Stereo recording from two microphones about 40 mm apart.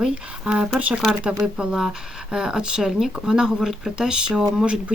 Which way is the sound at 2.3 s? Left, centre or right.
Centre.